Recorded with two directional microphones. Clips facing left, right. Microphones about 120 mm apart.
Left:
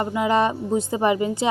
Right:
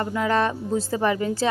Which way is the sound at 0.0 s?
15° left (ahead or behind).